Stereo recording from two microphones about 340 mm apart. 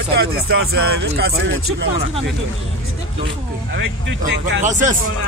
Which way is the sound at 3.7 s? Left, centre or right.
Right.